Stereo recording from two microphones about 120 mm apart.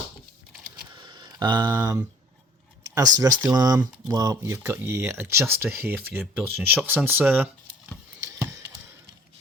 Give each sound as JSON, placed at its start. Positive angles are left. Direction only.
{"t": 0.9, "sound": "a sound", "side_deg": -40}
{"t": 2.9, "sound": "speech", "side_deg": -30}
{"t": 8.3, "sound": "chop", "side_deg": -20}